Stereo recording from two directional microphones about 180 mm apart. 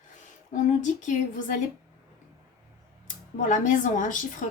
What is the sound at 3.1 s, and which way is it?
Speech, 45° left (ahead or behind).